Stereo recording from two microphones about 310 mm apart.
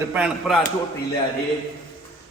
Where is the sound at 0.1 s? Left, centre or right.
Centre.